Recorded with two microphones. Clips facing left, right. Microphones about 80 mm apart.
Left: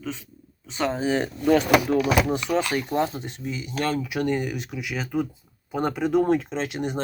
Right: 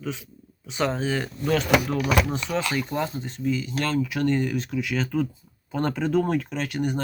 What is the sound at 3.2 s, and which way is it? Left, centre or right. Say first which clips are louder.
Speech: right 5 dB; centre.